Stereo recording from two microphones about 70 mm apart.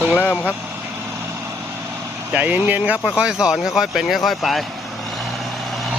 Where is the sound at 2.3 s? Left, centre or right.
Right; by 4.6 s centre.